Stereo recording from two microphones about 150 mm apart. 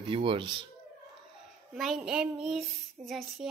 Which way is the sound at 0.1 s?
35° right (ahead or behind).